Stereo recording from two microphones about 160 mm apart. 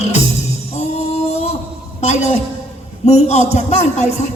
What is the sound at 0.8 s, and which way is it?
Music, 40° left (ahead or behind).